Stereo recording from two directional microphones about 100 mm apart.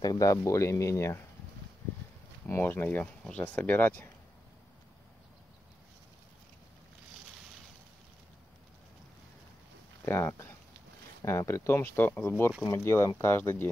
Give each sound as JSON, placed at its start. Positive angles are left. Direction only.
{"t": 0.0, "sound": "speech", "side_deg": 40}
{"t": 2.4, "sound": "speech", "side_deg": 20}
{"t": 10.0, "sound": "speech", "side_deg": 25}